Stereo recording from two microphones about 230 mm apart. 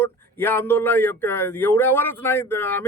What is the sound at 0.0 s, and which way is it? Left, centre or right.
Speech, centre.